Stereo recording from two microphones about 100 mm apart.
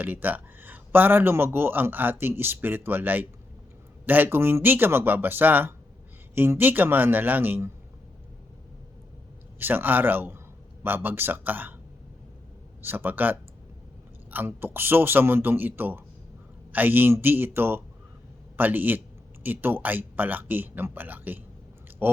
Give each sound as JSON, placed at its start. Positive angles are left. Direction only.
{"t": 0.0, "sound": "speech", "side_deg": -20}
{"t": 9.6, "sound": "speech", "side_deg": -20}
{"t": 12.8, "sound": "speech", "side_deg": -20}